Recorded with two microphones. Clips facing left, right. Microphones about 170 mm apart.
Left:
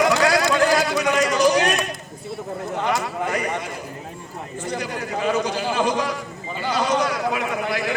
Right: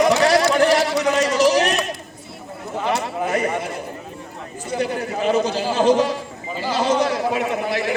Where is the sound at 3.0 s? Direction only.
25° right (ahead or behind).